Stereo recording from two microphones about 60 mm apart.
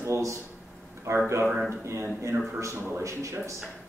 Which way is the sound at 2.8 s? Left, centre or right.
Right.